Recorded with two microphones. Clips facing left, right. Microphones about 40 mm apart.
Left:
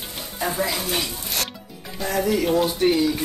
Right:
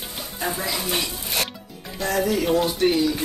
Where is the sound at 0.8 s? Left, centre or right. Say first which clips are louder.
Even; centre.